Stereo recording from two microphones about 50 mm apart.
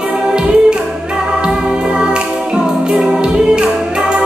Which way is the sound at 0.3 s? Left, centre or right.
Centre.